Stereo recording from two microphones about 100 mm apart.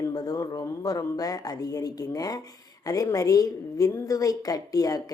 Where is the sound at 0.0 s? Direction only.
40° left (ahead or behind).